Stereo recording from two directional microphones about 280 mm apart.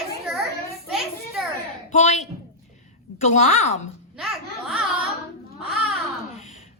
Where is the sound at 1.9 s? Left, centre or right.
Left.